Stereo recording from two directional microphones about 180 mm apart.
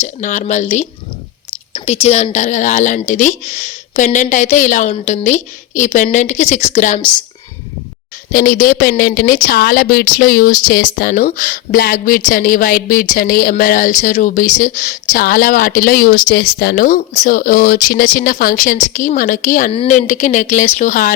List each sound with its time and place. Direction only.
0.0 s a woman's voice: 40° left (ahead or behind)
8.3 s a woman's voice: 50° left (ahead or behind)